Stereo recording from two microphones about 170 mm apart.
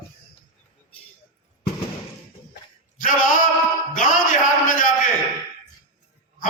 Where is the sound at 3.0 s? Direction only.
50° left (ahead or behind).